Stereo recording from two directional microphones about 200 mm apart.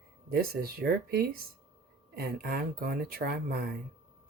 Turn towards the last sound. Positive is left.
turn(degrees=-50)  # may be behind; listen again after turning